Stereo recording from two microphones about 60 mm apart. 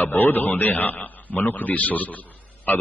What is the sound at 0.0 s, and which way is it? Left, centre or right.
A man's voice, left.